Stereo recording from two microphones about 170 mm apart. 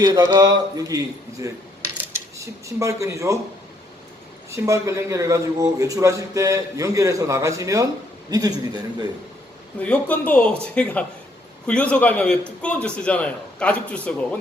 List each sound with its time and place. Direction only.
0.0 s a man's voice: 20° right (ahead or behind)
4.5 s a man's voice: 15° right (ahead or behind)
9.8 s a man's voice: 10° left (ahead or behind)